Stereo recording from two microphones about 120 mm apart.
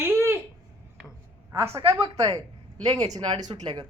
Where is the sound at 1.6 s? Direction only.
20° right (ahead or behind).